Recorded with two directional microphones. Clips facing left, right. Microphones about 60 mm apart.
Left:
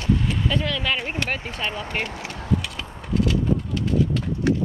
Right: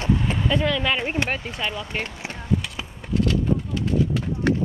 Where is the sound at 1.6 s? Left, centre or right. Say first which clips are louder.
Left 1 dB; left.